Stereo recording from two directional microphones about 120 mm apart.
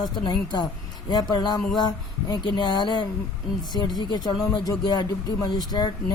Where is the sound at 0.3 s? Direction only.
35° left (ahead or behind).